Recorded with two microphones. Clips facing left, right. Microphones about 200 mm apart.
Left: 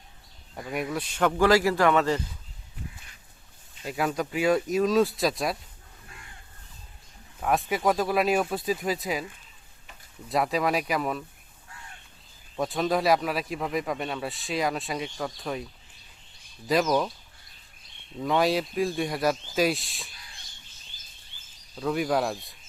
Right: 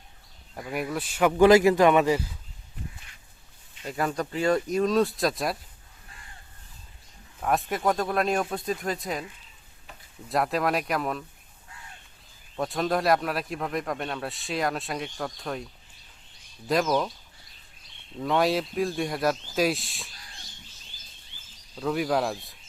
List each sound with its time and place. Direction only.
0.5 s speech: centre (ahead or behind)
1.4 s speech: 20° right (ahead or behind)
3.8 s speech: centre (ahead or behind)
7.4 s speech: centre (ahead or behind)
10.2 s speech: centre (ahead or behind)
12.5 s speech: centre (ahead or behind)
16.6 s speech: centre (ahead or behind)
18.2 s speech: centre (ahead or behind)
21.8 s speech: centre (ahead or behind)